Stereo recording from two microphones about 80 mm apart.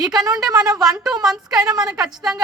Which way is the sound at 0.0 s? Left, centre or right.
Right.